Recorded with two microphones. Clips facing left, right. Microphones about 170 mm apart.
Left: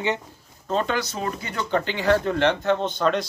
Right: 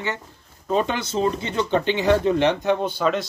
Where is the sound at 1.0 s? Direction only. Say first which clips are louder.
Right 5 dB; 25° right (ahead or behind).